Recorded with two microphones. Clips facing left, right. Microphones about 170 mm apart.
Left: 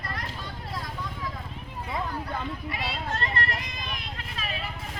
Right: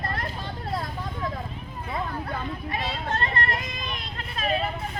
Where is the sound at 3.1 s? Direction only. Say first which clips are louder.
Right 4 dB; 50° right (ahead or behind).